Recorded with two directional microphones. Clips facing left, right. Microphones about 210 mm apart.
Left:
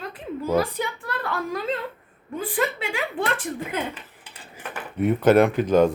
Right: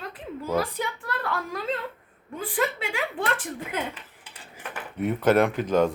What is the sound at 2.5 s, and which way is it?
Speech, centre (ahead or behind).